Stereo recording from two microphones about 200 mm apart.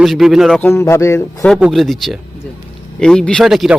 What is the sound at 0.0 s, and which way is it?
Speech, centre (ahead or behind).